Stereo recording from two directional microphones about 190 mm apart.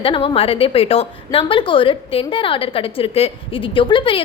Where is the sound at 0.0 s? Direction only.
30° left (ahead or behind).